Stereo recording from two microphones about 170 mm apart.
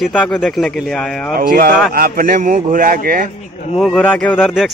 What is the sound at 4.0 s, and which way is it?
Speech, 10° left (ahead or behind).